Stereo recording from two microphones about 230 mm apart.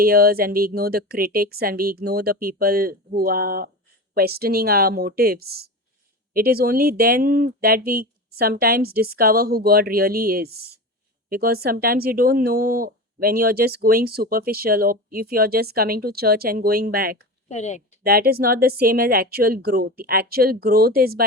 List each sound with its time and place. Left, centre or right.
0.0 s speech: right
17.5 s a woman's voice: left
18.0 s speech: right